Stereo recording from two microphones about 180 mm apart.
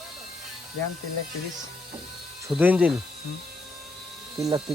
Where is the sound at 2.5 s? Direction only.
10° right (ahead or behind).